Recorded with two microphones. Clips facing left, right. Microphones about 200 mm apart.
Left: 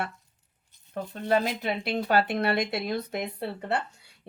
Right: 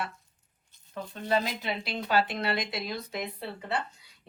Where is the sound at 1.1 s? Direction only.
55° left (ahead or behind).